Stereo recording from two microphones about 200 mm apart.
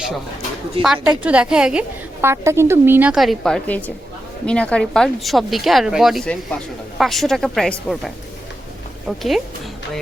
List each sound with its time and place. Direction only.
0.8 s a woman's voice: 30° right (ahead or behind)
1.2 s a woman's voice: 5° right (ahead or behind)